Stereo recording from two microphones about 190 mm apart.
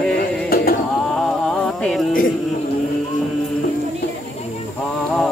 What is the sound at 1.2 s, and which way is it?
Music, centre (ahead or behind).